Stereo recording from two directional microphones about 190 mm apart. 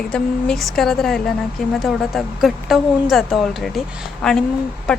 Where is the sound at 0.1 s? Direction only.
5° left (ahead or behind).